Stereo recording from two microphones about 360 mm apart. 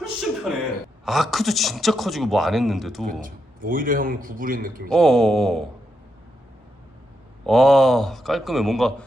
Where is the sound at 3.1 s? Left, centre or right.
Right.